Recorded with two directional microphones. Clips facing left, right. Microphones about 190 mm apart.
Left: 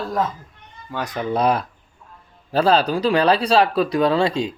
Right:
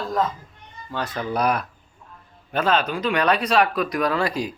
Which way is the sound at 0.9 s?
15° left (ahead or behind).